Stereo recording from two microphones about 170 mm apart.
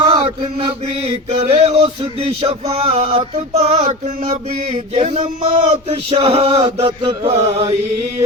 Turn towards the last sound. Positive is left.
turn(degrees=-35)  # may be behind; listen again after turning